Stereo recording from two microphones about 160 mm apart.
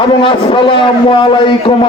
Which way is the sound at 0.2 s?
35° left (ahead or behind).